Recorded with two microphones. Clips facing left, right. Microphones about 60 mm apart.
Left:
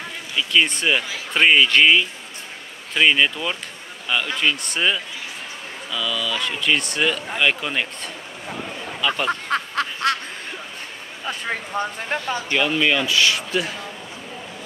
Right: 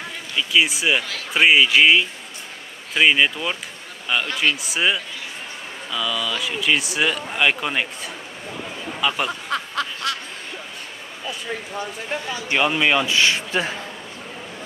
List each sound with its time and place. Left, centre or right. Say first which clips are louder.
0.0 s speech: even; centre
9.5 s snicker: left 2 dB; left
12.1 s speech: left 3 dB; left
12.4 s a man's voice: right 2 dB; centre